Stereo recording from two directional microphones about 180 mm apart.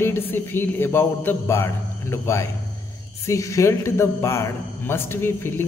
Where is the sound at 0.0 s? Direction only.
10° left (ahead or behind).